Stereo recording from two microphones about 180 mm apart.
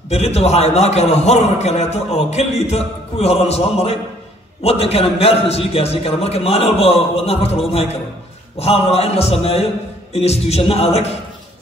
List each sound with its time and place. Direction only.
0.1 s a man's voice: 35° left (ahead or behind)